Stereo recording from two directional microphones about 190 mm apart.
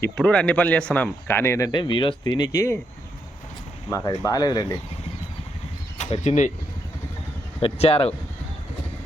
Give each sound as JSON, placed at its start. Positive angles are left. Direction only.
{"t": 0.0, "sound": "speech", "side_deg": 5}
{"t": 3.8, "sound": "speech", "side_deg": 15}
{"t": 6.0, "sound": "speech", "side_deg": 35}
{"t": 7.6, "sound": "speech", "side_deg": 30}